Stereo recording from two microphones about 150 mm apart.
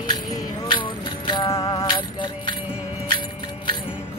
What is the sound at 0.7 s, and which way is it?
Music, 30° left (ahead or behind).